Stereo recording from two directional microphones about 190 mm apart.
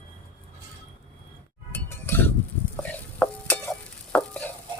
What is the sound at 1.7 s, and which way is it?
Chink, 10° left (ahead or behind).